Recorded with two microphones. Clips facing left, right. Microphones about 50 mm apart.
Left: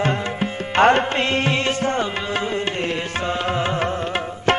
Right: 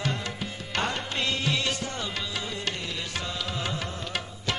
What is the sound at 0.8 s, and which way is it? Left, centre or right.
Music, left.